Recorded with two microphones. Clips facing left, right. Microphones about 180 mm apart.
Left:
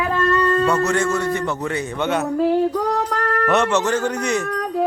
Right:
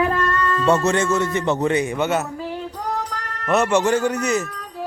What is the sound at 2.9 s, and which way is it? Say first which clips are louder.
Music: left 6 dB; 65° left (ahead or behind).